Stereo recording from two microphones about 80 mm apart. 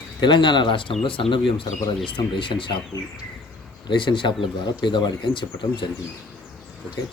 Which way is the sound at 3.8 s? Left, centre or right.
Left.